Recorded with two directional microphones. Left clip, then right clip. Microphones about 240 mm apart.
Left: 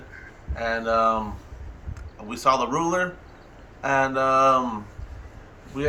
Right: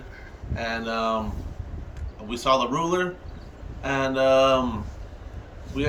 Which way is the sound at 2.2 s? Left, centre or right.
Centre.